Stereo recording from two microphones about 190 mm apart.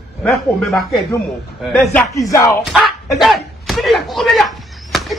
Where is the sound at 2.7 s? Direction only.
Centre (ahead or behind).